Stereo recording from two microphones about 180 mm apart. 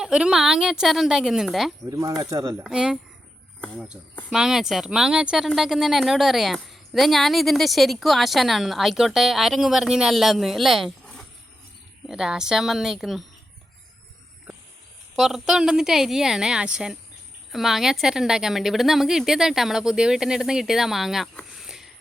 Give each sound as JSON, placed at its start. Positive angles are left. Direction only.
{"t": 0.0, "sound": "speech", "side_deg": -5}
{"t": 1.9, "sound": "speech", "side_deg": -20}
{"t": 2.6, "sound": "speech", "side_deg": -5}
{"t": 4.3, "sound": "speech", "side_deg": -5}
{"t": 15.1, "sound": "speech", "side_deg": 0}